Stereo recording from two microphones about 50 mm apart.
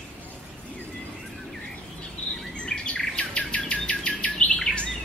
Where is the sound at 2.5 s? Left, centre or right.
Centre.